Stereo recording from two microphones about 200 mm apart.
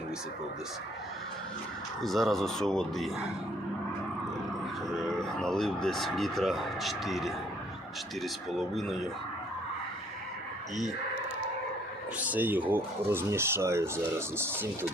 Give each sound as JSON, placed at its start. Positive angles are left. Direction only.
{"t": 2.0, "sound": "speech", "side_deg": 0}
{"t": 4.9, "sound": "speech", "side_deg": 0}
{"t": 12.2, "sound": "speech", "side_deg": -10}